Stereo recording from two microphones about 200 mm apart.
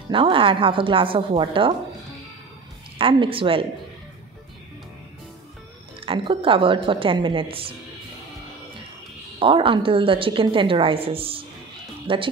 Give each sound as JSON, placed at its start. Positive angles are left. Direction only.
{"t": 0.1, "sound": "a woman's voice", "side_deg": -25}
{"t": 3.0, "sound": "a woman's voice", "side_deg": -25}
{"t": 5.9, "sound": "a woman's voice", "side_deg": -25}
{"t": 9.4, "sound": "a woman's voice", "side_deg": -25}